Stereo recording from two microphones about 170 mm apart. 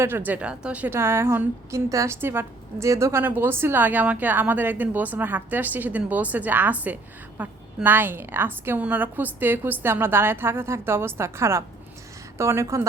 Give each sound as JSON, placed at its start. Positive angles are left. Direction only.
{"t": 0.0, "sound": "a woman's voice", "side_deg": -10}